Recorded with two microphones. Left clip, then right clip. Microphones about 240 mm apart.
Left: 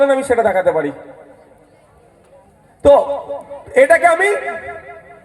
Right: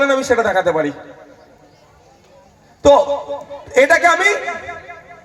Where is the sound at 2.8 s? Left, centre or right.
Left.